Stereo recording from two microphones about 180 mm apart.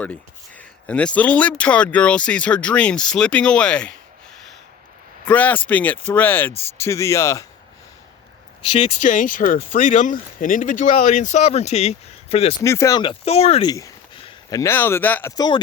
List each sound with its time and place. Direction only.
0.5 s speech: 10° left (ahead or behind)
5.2 s speech: 10° left (ahead or behind)
8.8 s speech: 40° left (ahead or behind)
12.6 s speech: 15° left (ahead or behind); by 13.7 s 35° left (ahead or behind)
13.7 s speech: 20° left (ahead or behind)
15.4 s speech: 25° left (ahead or behind)